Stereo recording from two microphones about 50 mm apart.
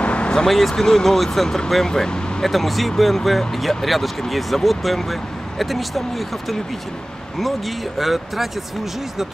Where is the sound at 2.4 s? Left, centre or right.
Centre.